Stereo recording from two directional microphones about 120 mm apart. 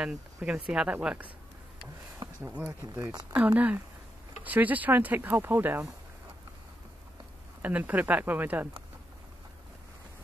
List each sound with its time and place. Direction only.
0.0 s speech: 10° right (ahead or behind)
2.4 s speech: 10° right (ahead or behind)
7.6 s speech: 15° right (ahead or behind)